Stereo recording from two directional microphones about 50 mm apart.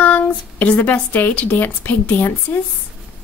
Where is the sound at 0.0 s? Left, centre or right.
Left.